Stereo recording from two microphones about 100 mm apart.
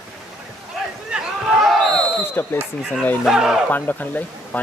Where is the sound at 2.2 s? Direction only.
20° left (ahead or behind).